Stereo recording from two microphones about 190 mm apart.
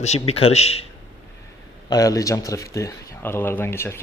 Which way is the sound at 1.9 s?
20° left (ahead or behind).